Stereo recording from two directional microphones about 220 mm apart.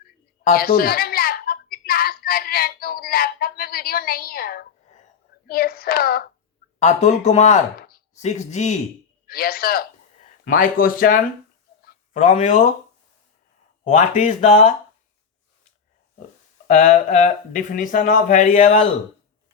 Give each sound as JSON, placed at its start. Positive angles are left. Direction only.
{"t": 0.4, "sound": "a sound", "side_deg": 40}
{"t": 5.5, "sound": "hands", "side_deg": 40}
{"t": 6.7, "sound": "speech", "side_deg": 30}
{"t": 9.2, "sound": "a man's voice", "side_deg": 40}
{"t": 11.8, "sound": "a sound", "side_deg": 40}
{"t": 13.8, "sound": "speech", "side_deg": 35}
{"t": 16.6, "sound": "speech", "side_deg": 35}